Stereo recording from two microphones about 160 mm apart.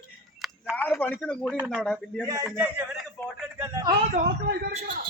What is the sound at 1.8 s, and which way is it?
Speech, 5° left (ahead or behind).